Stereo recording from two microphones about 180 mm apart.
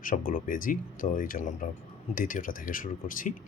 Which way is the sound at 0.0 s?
50° left (ahead or behind).